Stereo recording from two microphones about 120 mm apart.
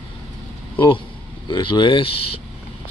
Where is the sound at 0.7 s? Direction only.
45° left (ahead or behind).